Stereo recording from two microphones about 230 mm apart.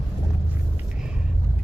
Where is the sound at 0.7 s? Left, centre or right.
Centre.